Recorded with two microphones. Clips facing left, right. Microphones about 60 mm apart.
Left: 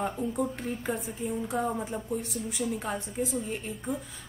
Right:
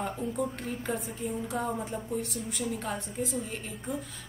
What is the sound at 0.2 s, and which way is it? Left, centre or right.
A woman's voice, centre.